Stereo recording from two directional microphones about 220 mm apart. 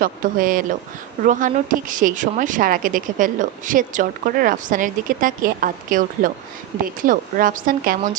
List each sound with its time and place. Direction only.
0.0 s speech: 40° right (ahead or behind)